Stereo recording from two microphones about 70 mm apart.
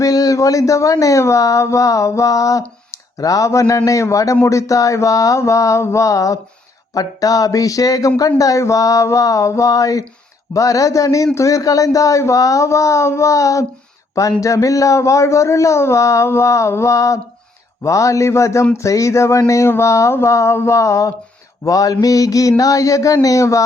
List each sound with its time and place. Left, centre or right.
0.0 s speech: left